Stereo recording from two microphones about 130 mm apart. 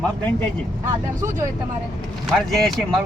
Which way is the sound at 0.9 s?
25° right (ahead or behind).